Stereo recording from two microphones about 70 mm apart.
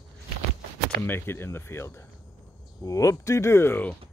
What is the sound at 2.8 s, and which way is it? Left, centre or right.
Speech, left.